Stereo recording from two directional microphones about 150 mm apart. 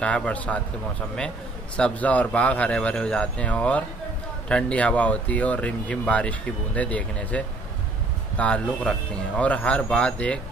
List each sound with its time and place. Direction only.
0.0 s speech: 10° left (ahead or behind)
1.8 s speech: 10° left (ahead or behind)